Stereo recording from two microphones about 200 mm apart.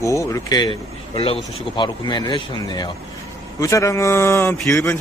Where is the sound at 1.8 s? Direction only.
20° left (ahead or behind).